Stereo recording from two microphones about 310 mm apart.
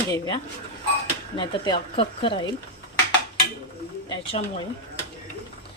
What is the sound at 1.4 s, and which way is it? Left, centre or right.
Speech, centre.